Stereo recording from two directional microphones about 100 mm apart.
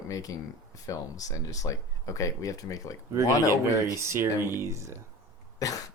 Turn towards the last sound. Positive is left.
turn(degrees=35)  # may be behind; listen again after turning